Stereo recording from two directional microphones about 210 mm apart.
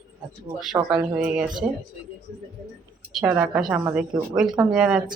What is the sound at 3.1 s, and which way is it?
Speech, 5° right (ahead or behind).